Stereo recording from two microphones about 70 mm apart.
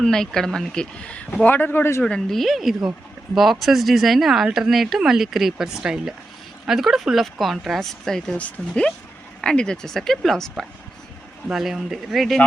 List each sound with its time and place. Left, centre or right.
0.0 s speech: centre
1.5 s speech: left
2.0 s speech: centre
8.4 s speech: centre
11.5 s speech: centre